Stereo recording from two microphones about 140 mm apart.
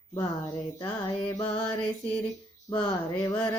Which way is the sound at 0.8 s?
30° left (ahead or behind).